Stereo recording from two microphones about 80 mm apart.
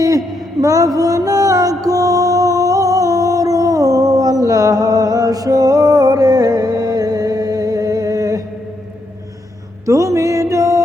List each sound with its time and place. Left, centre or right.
0.6 s music: right
9.8 s music: right